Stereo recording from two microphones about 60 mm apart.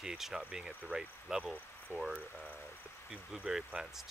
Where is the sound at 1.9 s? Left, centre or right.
Left.